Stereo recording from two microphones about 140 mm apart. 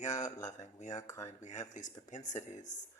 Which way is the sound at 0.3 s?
25° left (ahead or behind).